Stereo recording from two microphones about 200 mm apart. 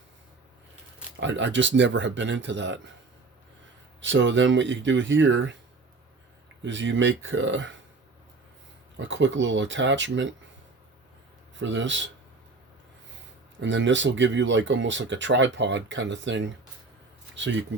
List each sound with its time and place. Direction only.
1.2 s speech: 65° right (ahead or behind)
4.0 s speech: 65° right (ahead or behind)
6.6 s speech: 65° right (ahead or behind)
9.0 s speech: 65° right (ahead or behind)
11.5 s speech: 65° right (ahead or behind)
13.6 s speech: 65° right (ahead or behind)